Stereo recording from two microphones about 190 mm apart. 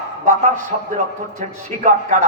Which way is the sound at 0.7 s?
40° right (ahead or behind).